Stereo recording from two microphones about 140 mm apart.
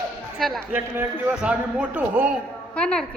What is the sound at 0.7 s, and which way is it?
A man's voice, 15° right (ahead or behind).